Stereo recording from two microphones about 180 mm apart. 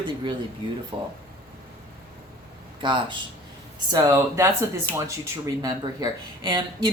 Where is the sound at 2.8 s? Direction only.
25° right (ahead or behind).